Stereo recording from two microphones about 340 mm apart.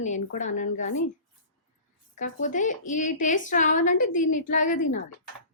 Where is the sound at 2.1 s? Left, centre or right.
Left.